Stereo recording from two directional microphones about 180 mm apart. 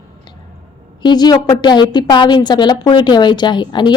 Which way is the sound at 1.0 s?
25° left (ahead or behind).